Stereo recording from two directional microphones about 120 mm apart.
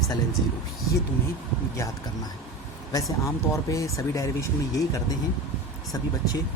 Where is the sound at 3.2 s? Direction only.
25° left (ahead or behind).